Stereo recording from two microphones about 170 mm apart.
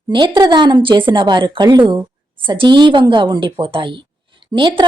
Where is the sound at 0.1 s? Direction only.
30° right (ahead or behind).